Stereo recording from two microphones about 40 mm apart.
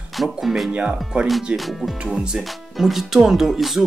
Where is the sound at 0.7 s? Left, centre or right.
Right.